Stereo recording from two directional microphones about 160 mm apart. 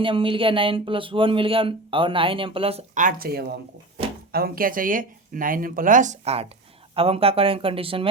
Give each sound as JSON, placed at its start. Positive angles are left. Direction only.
{"t": 0.0, "sound": "speech", "side_deg": -35}
{"t": 2.9, "sound": "speech", "side_deg": -60}